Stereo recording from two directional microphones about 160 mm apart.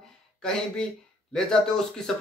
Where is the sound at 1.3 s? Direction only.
5° left (ahead or behind).